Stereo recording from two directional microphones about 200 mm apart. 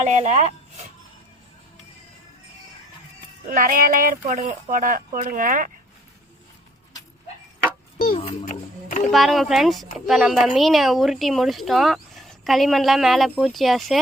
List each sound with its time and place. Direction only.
0.0 s speech: 35° right (ahead or behind)
3.5 s speech: 45° right (ahead or behind)
8.1 s a sound: 30° left (ahead or behind)
9.1 s speech: centre (ahead or behind)